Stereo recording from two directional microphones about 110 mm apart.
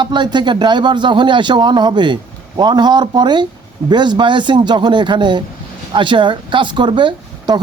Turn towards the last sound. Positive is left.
turn(degrees=-45)  # may be behind; listen again after turning